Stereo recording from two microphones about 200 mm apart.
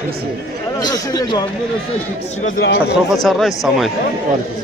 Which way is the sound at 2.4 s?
50° left (ahead or behind).